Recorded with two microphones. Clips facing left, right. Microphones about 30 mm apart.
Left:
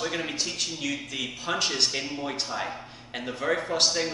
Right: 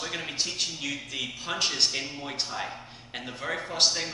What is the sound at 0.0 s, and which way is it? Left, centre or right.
A man's voice, centre.